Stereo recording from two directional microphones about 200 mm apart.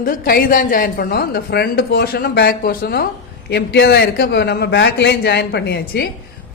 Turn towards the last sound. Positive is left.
turn(degrees=55)  # may be behind; listen again after turning